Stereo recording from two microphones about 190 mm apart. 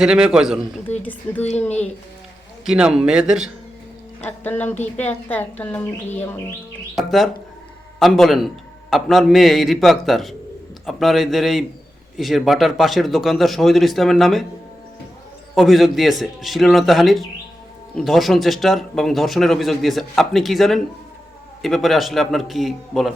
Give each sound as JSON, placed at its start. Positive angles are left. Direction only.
{"t": 0.0, "sound": "speech", "side_deg": -5}
{"t": 0.9, "sound": "a woman's voice", "side_deg": 10}
{"t": 1.5, "sound": "speech", "side_deg": 35}
{"t": 2.6, "sound": "speech", "side_deg": -5}
{"t": 4.2, "sound": "a woman's voice", "side_deg": 10}
{"t": 6.9, "sound": "speech", "side_deg": 0}
{"t": 15.5, "sound": "speech", "side_deg": 0}